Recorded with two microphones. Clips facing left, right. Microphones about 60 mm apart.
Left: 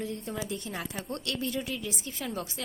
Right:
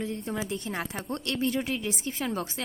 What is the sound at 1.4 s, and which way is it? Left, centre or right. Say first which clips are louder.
A woman's voice: right 7 dB; right.